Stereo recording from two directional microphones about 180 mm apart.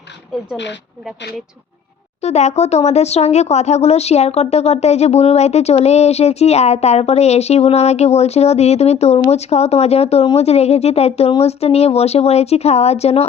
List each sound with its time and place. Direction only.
0.5 s a woman's voice: 80° left
2.2 s speech: 40° left (ahead or behind)